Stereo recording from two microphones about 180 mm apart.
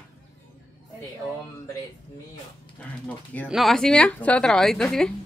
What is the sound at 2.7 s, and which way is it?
A woman's voice, 10° left (ahead or behind).